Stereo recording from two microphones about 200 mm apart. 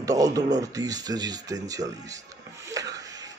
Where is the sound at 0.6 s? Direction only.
15° right (ahead or behind).